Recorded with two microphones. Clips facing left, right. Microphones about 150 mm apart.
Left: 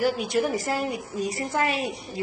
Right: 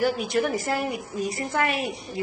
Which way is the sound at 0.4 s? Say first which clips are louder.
Even; 30° left (ahead or behind).